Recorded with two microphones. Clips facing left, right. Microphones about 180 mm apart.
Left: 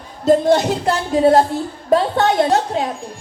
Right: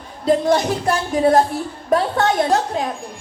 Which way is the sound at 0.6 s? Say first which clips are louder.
Left 1 dB; 25° left (ahead or behind).